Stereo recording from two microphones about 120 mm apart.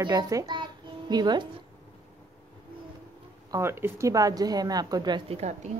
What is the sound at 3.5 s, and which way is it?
A woman's voice, 20° right (ahead or behind).